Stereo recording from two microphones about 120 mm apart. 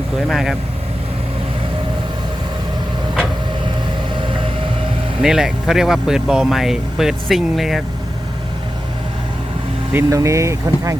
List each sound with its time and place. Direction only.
0.3 s speech: centre (ahead or behind)
5.2 s speech: 5° right (ahead or behind)
9.9 s speech: 25° right (ahead or behind)